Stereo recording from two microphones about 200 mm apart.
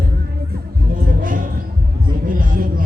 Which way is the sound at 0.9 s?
45° right (ahead or behind).